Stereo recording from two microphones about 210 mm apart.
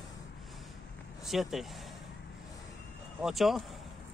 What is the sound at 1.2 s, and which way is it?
Speech, centre (ahead or behind).